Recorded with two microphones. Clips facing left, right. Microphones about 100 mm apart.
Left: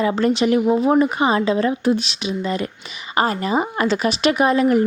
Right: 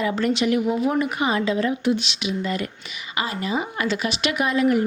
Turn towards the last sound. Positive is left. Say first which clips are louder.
# left 4 dB
turn(degrees=35)  # may be behind; listen again after turning